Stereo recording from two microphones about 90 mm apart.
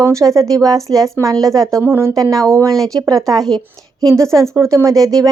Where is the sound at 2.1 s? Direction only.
40° right (ahead or behind).